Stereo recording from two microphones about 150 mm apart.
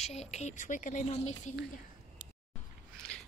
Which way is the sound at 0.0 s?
45° left (ahead or behind).